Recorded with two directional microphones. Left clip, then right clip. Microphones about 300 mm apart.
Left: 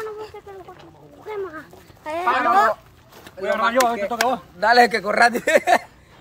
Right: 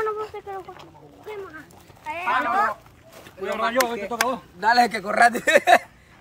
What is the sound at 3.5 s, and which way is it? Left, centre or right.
A man's voice, centre.